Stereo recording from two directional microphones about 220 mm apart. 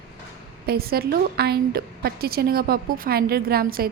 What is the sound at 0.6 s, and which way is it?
A woman's voice, 45° right (ahead or behind).